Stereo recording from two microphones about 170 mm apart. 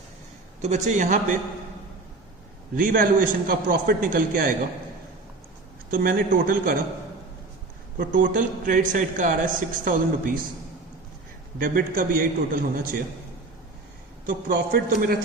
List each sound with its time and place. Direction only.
0.6 s a man's voice: 45° right (ahead or behind)
2.7 s a man's voice: 55° right (ahead or behind)
5.9 s a man's voice: 55° right (ahead or behind)
7.9 s a man's voice: 55° right (ahead or behind)
11.5 s a man's voice: 55° right (ahead or behind)
14.3 s a man's voice: 55° right (ahead or behind)